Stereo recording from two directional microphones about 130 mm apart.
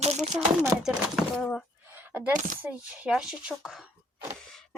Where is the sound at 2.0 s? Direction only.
15° right (ahead or behind).